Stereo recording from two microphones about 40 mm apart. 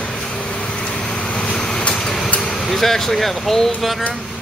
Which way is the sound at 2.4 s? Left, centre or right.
Centre.